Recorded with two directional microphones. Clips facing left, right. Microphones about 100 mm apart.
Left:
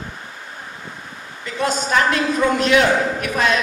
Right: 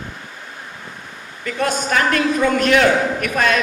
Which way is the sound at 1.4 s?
55° right (ahead or behind).